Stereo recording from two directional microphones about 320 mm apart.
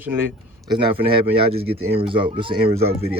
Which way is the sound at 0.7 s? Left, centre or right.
Centre.